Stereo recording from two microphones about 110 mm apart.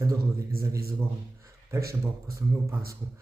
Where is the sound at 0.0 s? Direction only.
30° right (ahead or behind).